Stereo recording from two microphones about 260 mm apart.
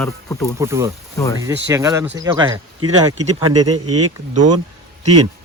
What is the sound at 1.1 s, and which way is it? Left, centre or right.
Speech, centre.